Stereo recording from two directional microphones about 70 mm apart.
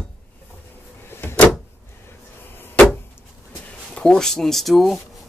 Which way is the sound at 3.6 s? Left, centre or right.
Centre.